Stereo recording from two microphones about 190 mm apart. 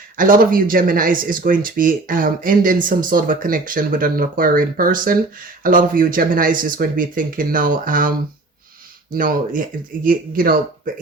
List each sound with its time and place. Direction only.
0.2 s speech: 45° right (ahead or behind)
9.1 s speech: 45° right (ahead or behind)